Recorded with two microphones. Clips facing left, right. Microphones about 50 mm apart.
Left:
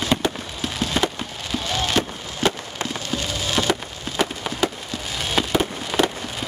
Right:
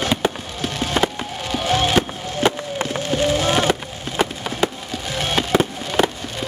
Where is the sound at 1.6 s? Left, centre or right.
Right.